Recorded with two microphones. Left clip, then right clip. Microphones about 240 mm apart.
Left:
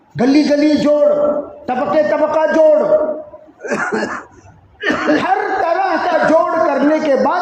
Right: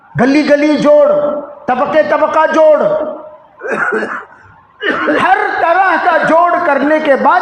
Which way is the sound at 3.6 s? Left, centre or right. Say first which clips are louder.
Right 4 dB; centre.